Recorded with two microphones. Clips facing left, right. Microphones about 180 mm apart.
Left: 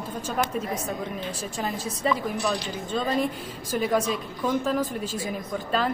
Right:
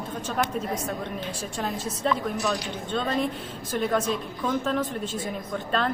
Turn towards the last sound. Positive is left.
turn(degrees=5)  # may be behind; listen again after turning